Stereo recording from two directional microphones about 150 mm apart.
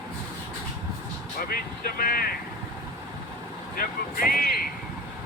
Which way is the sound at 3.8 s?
75° left (ahead or behind).